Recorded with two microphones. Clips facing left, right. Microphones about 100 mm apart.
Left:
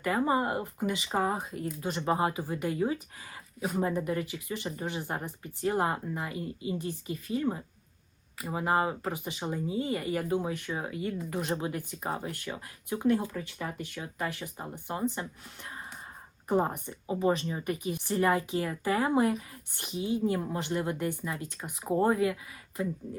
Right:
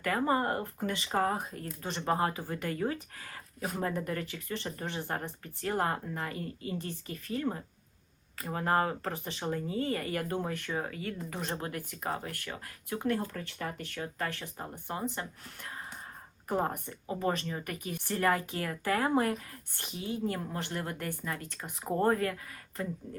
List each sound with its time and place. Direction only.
0.0 s speech: 15° left (ahead or behind)